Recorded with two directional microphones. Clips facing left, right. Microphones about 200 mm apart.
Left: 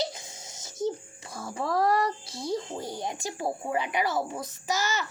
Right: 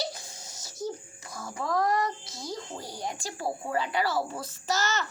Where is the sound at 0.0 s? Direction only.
20° left (ahead or behind).